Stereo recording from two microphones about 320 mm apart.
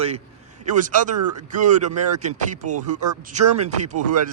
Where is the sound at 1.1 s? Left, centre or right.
Right.